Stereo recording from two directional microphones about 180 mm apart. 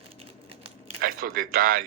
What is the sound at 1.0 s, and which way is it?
Speech, 50° right (ahead or behind).